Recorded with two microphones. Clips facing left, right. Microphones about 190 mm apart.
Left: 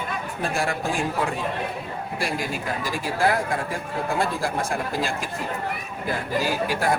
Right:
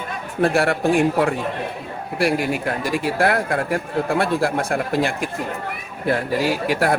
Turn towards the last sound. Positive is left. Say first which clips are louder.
# right 4 dB
turn(degrees=-65)  # may be behind; listen again after turning